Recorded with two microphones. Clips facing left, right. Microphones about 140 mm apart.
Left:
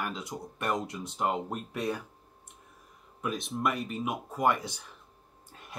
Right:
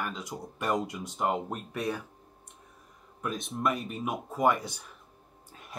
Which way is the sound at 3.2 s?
Centre (ahead or behind).